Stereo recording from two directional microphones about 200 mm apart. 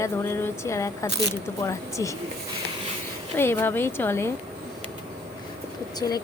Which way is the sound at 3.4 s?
10° left (ahead or behind).